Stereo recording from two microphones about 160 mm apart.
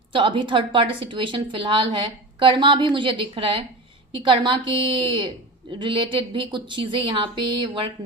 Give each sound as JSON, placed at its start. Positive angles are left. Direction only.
{"t": 0.1, "sound": "a woman's voice", "side_deg": -30}